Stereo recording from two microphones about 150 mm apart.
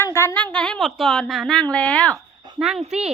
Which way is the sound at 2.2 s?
30° right (ahead or behind).